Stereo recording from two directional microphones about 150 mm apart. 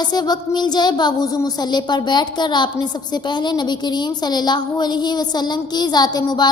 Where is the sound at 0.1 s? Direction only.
25° left (ahead or behind).